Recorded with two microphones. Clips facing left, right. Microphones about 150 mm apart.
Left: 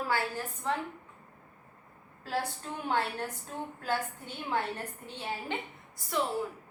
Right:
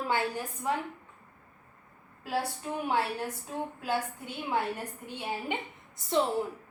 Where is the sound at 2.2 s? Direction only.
10° right (ahead or behind).